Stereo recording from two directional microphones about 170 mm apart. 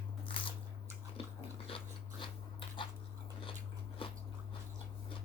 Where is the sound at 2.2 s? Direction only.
30° left (ahead or behind).